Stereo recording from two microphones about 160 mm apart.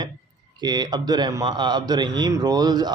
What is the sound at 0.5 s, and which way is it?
A man's voice, 25° right (ahead or behind).